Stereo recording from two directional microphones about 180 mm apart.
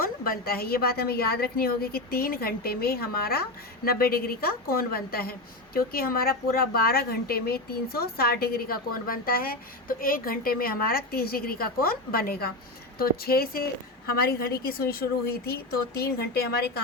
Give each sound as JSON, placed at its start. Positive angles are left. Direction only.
{"t": 0.0, "sound": "speech", "side_deg": 55}